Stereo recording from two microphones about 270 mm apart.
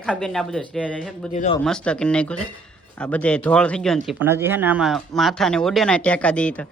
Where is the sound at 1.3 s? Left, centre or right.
Left.